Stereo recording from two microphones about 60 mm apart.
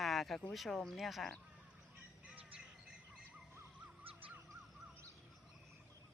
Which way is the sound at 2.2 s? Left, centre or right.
Centre.